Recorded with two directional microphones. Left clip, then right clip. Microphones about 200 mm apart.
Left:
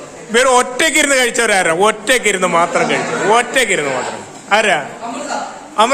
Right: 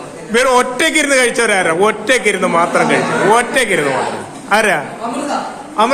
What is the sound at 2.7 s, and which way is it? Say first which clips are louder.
A man's voice: right 2 dB; 5° left (ahead or behind).